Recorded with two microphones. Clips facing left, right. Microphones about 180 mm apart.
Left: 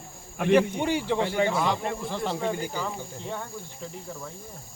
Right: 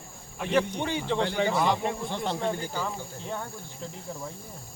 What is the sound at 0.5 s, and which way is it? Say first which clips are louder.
Speech: left 4 dB; 10° left (ahead or behind).